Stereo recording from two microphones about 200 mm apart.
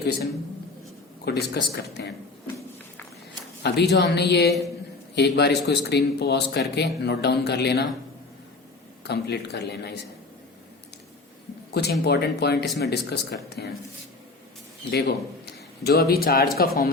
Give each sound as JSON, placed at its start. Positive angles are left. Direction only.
{"t": 1.2, "sound": "speech", "side_deg": 55}
{"t": 3.6, "sound": "speech", "side_deg": 55}
{"t": 9.0, "sound": "speech", "side_deg": 55}
{"t": 11.7, "sound": "speech", "side_deg": 55}
{"t": 14.8, "sound": "speech", "side_deg": 60}